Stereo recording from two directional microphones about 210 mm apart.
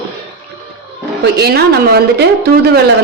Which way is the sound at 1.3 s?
50° right (ahead or behind).